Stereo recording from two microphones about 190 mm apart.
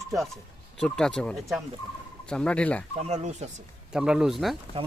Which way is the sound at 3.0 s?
35° right (ahead or behind).